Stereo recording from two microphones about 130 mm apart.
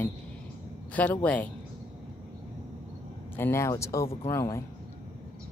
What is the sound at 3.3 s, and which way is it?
Speech, 20° left (ahead or behind).